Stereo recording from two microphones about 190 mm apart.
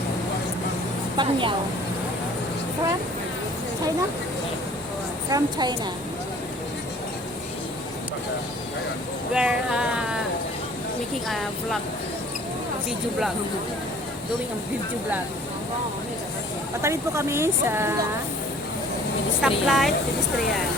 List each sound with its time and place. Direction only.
1.1 s a woman's voice: 25° right (ahead or behind)
5.3 s a woman's voice: 20° right (ahead or behind)
9.3 s a sound: 5° right (ahead or behind)
16.8 s speech: 15° right (ahead or behind)
19.4 s a woman's voice: centre (ahead or behind)